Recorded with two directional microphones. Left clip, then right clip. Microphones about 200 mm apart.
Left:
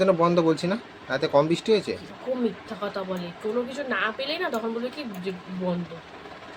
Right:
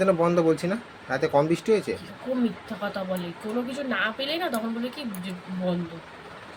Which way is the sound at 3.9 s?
15° left (ahead or behind).